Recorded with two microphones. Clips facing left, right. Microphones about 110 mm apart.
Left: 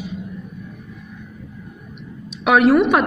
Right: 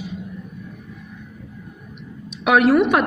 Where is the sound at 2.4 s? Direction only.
5° right (ahead or behind).